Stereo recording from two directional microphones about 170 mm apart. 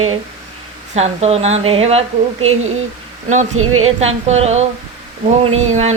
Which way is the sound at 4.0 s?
40° right (ahead or behind).